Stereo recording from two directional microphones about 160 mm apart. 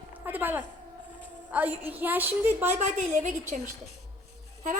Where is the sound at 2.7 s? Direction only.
50° right (ahead or behind).